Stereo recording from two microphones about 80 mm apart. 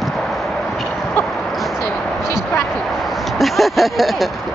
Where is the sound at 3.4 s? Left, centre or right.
Centre.